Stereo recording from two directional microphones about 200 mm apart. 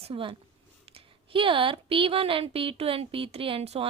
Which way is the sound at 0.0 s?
25° right (ahead or behind).